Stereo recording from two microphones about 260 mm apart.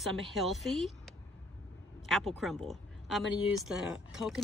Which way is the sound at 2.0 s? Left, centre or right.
Centre.